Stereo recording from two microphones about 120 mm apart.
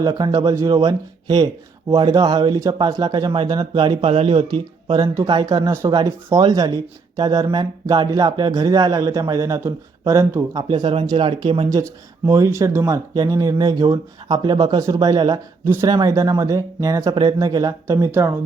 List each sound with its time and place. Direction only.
0.1 s speech: 35° right (ahead or behind)
4.0 s speech: 55° right (ahead or behind)
4.4 s speech: 40° right (ahead or behind)
10.7 s speech: 40° right (ahead or behind)
11.7 s speech: 25° right (ahead or behind)
15.6 s speech: 25° right (ahead or behind)